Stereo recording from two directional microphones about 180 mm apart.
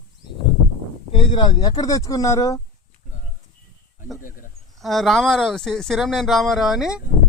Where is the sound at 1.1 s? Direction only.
30° left (ahead or behind).